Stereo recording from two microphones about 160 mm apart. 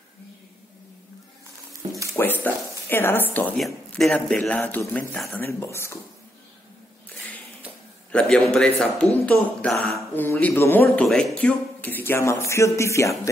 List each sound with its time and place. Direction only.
1.7 s a sound: 20° right (ahead or behind)
2.1 s a man's voice: 15° left (ahead or behind)
8.1 s a man's voice: 5° left (ahead or behind)